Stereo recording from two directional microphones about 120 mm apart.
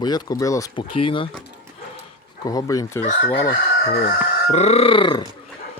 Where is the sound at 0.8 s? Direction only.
45° left (ahead or behind).